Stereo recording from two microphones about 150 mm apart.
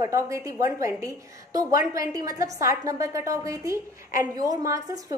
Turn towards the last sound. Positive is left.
turn(degrees=-25)  # may be behind; listen again after turning